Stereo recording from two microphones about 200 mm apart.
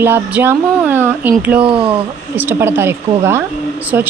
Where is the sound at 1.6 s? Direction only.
25° right (ahead or behind).